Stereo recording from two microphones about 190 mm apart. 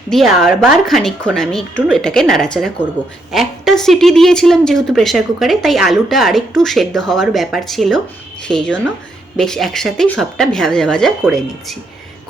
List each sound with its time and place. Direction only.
0.1 s a woman's voice: centre (ahead or behind)